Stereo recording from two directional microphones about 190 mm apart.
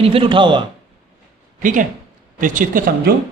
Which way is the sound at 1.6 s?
45° right (ahead or behind).